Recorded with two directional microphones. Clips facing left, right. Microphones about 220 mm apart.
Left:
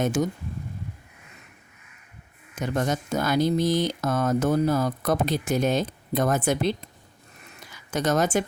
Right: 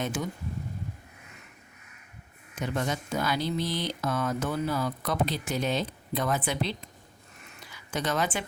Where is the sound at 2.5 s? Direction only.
45° left (ahead or behind).